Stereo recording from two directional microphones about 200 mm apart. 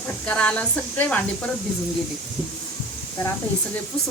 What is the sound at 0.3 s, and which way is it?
Speech, 5° left (ahead or behind).